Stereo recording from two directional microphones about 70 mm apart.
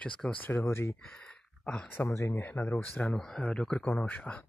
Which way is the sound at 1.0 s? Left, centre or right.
Centre.